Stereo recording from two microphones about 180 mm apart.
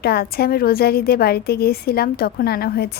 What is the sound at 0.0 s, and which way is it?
A woman's voice, 60° left (ahead or behind).